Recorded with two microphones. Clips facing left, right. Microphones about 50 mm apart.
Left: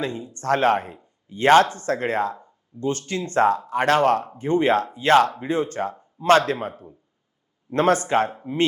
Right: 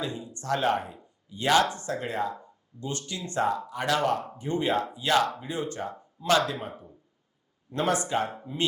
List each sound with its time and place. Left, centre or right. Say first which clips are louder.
0.0 s speech: left 6 dB; left